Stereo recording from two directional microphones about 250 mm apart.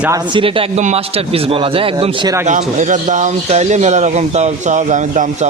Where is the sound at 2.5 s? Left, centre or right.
Right.